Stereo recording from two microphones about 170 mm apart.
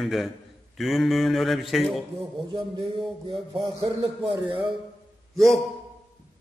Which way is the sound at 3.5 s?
30° right (ahead or behind).